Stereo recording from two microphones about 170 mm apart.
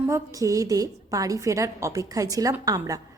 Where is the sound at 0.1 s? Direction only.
20° right (ahead or behind).